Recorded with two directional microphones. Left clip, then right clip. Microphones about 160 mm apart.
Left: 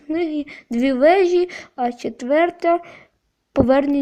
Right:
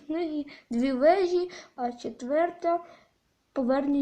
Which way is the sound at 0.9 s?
25° left (ahead or behind).